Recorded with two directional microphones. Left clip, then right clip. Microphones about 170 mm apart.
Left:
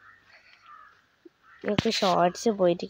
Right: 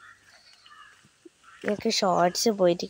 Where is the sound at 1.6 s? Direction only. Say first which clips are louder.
Even; 10° right (ahead or behind).